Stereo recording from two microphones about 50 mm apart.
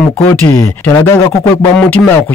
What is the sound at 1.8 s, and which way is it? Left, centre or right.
Speech, left.